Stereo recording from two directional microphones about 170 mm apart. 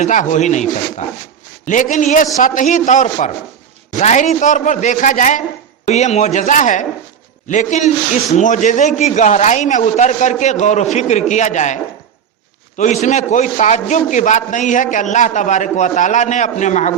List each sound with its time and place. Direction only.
0.0 s a man's voice: 45° left (ahead or behind)